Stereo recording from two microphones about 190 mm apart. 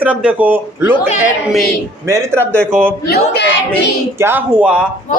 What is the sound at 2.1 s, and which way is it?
Speech, 15° right (ahead or behind).